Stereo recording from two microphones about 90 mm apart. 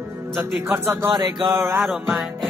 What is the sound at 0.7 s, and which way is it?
Speech, 30° right (ahead or behind).